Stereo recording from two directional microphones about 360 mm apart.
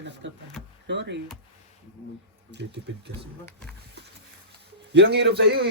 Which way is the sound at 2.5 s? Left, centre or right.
Right.